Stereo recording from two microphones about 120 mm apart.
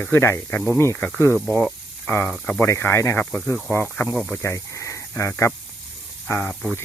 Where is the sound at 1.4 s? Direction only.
10° left (ahead or behind).